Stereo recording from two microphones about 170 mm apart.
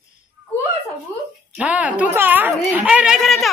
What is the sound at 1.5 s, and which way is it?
A woman's voice, 10° right (ahead or behind).